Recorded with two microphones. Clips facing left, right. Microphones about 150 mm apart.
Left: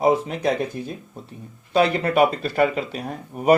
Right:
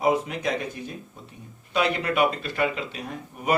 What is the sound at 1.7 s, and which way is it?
Speech, 35° left (ahead or behind).